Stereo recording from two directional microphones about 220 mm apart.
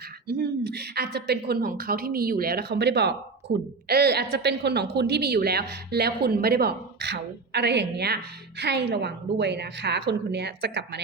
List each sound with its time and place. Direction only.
0.3 s a woman's voice: 45° right (ahead or behind)